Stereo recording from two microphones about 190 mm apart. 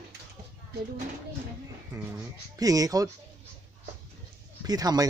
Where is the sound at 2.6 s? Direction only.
20° right (ahead or behind).